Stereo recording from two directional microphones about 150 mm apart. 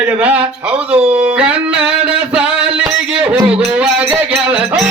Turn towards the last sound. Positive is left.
turn(degrees=-10)  # may be behind; listen again after turning